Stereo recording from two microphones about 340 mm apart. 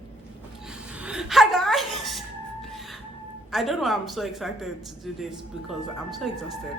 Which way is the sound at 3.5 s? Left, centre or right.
Centre.